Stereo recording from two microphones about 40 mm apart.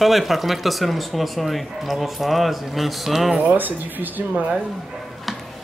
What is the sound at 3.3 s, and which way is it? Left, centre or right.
Speech, right.